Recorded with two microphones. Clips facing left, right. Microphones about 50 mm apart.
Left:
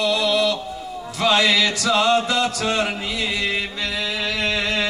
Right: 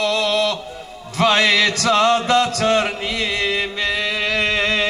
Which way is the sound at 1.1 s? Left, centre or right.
Right.